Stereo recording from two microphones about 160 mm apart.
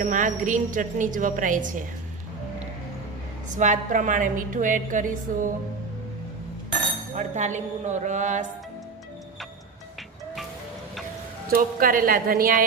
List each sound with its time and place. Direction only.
0.0 s a woman's voice: 55° right (ahead or behind)
3.5 s a woman's voice: 50° right (ahead or behind)
7.2 s a woman's voice: 50° right (ahead or behind)
11.5 s a woman's voice: 65° right (ahead or behind)